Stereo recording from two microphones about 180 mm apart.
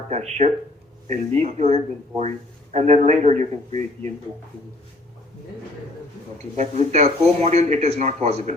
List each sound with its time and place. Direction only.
0.1 s speech: 40° right (ahead or behind)
6.6 s speech: 40° right (ahead or behind)